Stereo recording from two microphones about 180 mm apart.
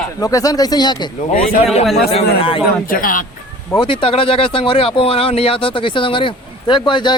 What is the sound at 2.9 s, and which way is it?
Speech, 50° left (ahead or behind).